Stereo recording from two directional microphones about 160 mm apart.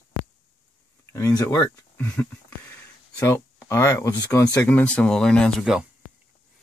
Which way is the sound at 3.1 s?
15° left (ahead or behind).